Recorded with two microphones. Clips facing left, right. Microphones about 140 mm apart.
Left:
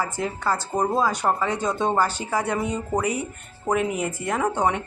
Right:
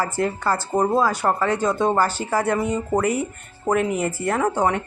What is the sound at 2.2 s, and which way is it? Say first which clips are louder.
Speech: right 4 dB; 15° left (ahead or behind).